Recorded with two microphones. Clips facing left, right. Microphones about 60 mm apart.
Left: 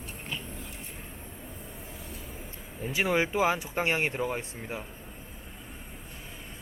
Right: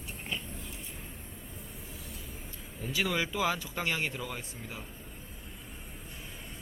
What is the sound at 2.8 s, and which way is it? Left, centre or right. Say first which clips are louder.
Speech: left 5 dB; left.